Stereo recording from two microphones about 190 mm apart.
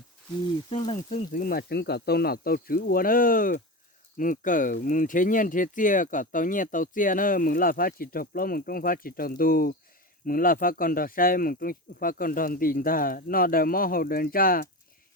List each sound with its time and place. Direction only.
0.7 s speech: 30° left (ahead or behind); by 14.7 s 50° left (ahead or behind)